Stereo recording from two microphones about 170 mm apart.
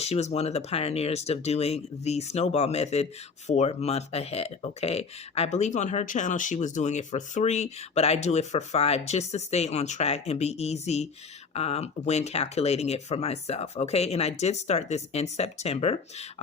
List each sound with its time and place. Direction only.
0.0 s speech: 40° left (ahead or behind)